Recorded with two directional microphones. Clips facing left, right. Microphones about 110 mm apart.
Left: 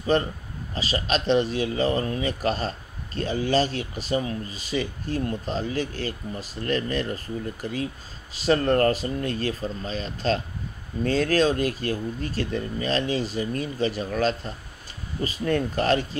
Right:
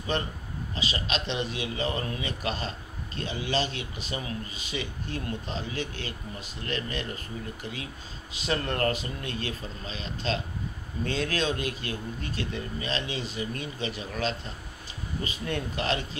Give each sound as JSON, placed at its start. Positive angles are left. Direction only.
{"t": 0.1, "sound": "speech", "side_deg": 40}